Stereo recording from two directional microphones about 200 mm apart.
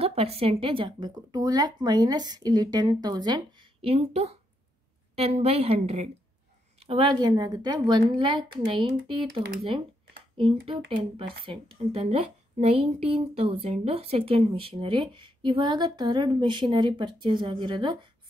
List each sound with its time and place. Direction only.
0.0 s a woman's voice: 30° right (ahead or behind)
11.9 s a woman's voice: 30° right (ahead or behind)